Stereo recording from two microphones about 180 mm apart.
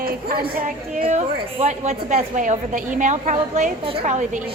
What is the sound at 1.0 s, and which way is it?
A woman's voice, 35° right (ahead or behind).